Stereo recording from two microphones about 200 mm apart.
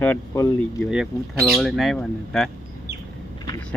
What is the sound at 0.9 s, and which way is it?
Speech, centre (ahead or behind).